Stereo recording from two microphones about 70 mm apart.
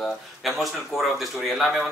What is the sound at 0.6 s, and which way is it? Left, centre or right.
Speech, centre.